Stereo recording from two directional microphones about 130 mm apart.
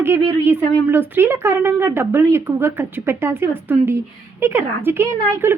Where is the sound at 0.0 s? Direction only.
15° right (ahead or behind).